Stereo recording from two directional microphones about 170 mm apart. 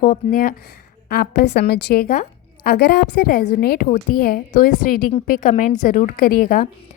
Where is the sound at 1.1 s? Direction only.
70° left (ahead or behind).